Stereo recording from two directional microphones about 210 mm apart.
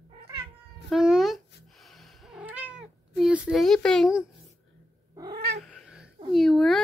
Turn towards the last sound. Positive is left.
turn(degrees=0)  # may be behind; listen again after turning